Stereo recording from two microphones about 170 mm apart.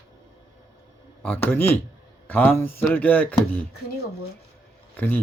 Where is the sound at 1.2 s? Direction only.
10° left (ahead or behind).